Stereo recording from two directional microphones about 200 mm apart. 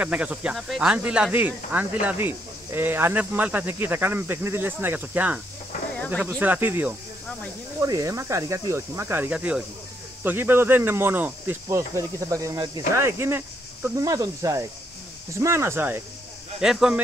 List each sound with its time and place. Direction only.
0.0 s speech: 5° right (ahead or behind)